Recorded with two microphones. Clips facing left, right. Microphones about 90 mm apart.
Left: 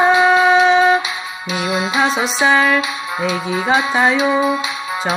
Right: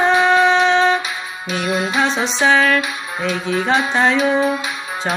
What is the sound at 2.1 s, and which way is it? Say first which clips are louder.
Music: left 1 dB; 5° left (ahead or behind).